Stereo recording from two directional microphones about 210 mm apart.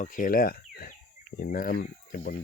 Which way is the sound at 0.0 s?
40° left (ahead or behind).